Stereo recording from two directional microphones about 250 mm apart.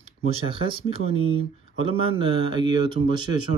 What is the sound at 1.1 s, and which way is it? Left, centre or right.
Speech, right.